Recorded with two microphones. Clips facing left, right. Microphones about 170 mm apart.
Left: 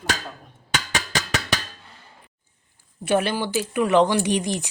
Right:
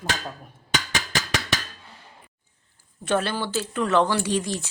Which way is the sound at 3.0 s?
15° left (ahead or behind).